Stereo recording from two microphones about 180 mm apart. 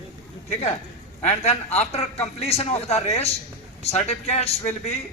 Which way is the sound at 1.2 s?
40° left (ahead or behind).